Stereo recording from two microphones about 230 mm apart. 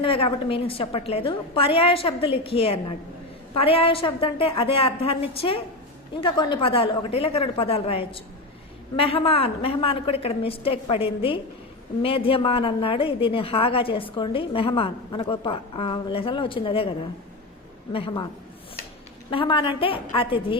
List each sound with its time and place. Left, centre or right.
0.0 s a woman's voice: left
17.9 s a woman's voice: left
19.3 s a woman's voice: left